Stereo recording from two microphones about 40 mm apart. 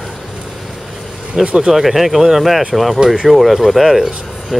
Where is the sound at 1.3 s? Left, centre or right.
Right.